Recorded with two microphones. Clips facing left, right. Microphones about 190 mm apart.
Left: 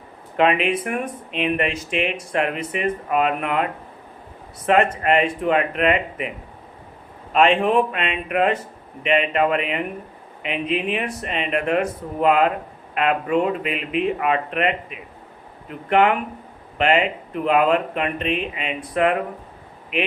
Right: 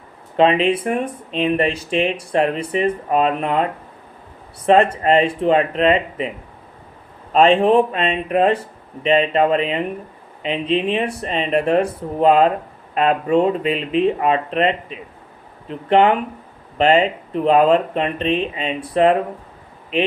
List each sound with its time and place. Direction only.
0.3 s speech: 30° right (ahead or behind)
7.3 s speech: 35° right (ahead or behind)